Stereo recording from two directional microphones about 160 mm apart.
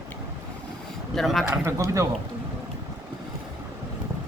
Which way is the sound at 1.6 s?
20° right (ahead or behind).